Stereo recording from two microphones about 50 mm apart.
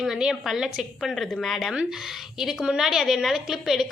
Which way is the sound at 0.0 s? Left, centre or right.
Centre.